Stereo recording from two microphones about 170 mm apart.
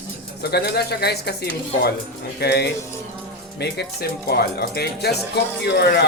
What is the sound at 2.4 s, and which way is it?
Speech, 75° left (ahead or behind).